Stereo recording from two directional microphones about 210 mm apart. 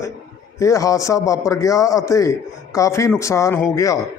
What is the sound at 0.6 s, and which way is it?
Speech, 15° left (ahead or behind).